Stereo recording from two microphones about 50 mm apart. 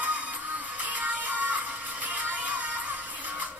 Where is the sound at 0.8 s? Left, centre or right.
Right.